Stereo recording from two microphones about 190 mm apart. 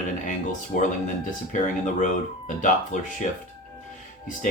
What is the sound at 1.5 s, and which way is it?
Speech, 40° left (ahead or behind).